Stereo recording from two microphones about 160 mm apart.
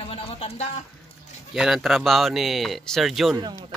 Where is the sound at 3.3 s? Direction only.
25° right (ahead or behind).